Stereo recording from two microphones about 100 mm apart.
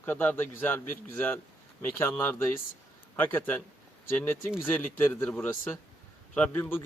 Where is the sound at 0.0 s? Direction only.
20° left (ahead or behind).